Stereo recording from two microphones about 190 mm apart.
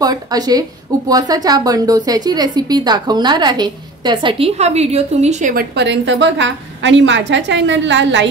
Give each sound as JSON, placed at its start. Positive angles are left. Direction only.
{"t": 0.0, "sound": "a woman's voice", "side_deg": -20}